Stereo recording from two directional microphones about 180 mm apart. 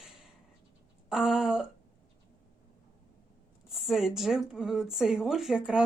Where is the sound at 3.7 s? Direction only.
Centre (ahead or behind).